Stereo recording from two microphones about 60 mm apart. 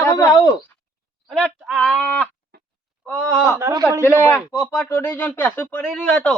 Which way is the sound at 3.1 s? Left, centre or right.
Left.